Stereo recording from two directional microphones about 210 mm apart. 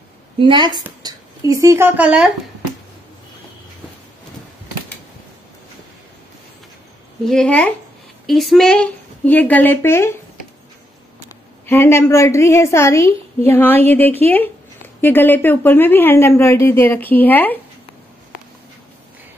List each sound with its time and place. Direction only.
0.4 s a woman's voice: 25° right (ahead or behind); by 2.2 s 5° right (ahead or behind)
7.2 s speech: 5° left (ahead or behind)
11.6 s speech: 10° left (ahead or behind)